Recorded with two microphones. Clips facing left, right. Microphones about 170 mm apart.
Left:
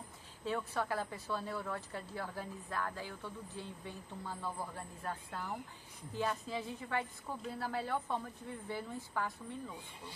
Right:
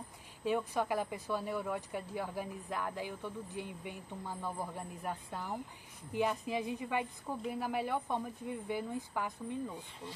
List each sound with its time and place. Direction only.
0.5 s speech: 15° right (ahead or behind)